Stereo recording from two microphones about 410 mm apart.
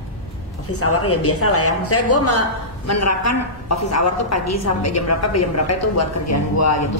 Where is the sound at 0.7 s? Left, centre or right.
Left.